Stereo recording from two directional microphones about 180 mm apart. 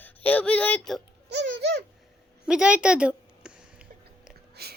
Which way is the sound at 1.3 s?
75° right (ahead or behind).